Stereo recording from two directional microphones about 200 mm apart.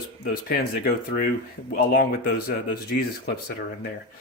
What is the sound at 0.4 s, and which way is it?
Speech, 45° left (ahead or behind).